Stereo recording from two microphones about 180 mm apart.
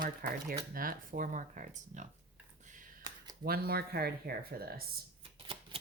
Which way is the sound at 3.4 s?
60° right (ahead or behind).